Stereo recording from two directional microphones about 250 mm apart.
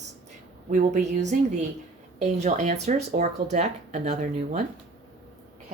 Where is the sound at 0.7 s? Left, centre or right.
Right.